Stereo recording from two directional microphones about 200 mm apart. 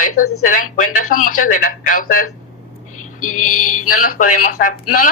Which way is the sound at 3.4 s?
90° left.